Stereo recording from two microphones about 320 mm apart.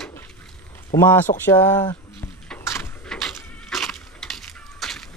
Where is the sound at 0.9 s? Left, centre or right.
Centre.